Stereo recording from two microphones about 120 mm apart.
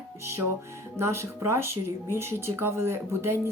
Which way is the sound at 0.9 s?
20° right (ahead or behind).